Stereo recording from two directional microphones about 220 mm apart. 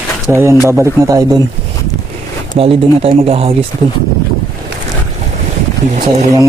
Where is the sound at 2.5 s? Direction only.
25° right (ahead or behind).